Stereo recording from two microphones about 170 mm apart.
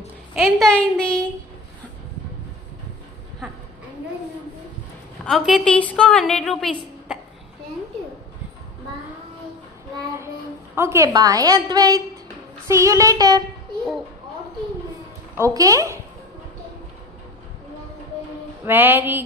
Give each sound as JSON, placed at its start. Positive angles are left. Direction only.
{"t": 0.3, "sound": "a woman's voice", "side_deg": 0}
{"t": 5.2, "sound": "a woman's voice", "side_deg": 0}
{"t": 10.1, "sound": "a woman's voice", "side_deg": -15}
{"t": 15.3, "sound": "speech", "side_deg": -20}
{"t": 18.6, "sound": "music", "side_deg": -10}